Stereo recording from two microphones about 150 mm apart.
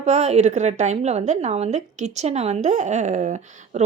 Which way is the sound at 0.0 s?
45° right (ahead or behind).